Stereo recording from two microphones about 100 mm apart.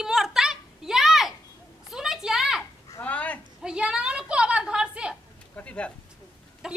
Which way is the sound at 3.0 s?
15° left (ahead or behind).